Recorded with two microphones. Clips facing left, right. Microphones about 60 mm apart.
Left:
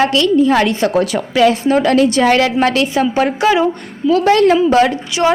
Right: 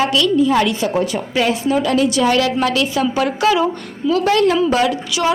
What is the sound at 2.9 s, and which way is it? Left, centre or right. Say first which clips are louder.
Speech: left 3 dB; left.